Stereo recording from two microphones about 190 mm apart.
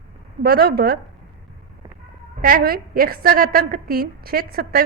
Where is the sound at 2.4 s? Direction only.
50° right (ahead or behind).